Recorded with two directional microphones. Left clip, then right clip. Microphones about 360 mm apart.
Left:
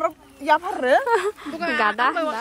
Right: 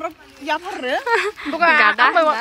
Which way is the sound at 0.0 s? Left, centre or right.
Left.